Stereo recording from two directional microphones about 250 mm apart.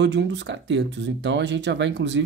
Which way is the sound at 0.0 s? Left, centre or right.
Right.